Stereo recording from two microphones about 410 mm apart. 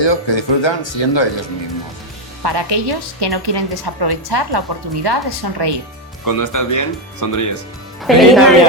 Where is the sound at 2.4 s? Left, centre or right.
Right.